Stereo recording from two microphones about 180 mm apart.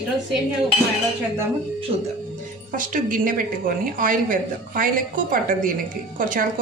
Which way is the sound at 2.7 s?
50° right (ahead or behind).